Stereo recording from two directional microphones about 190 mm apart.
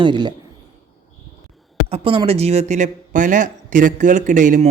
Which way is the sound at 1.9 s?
30° right (ahead or behind).